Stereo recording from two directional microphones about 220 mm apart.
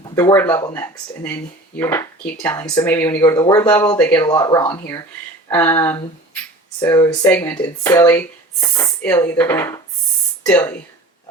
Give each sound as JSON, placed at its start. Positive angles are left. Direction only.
{"t": 0.2, "sound": "speech", "side_deg": 15}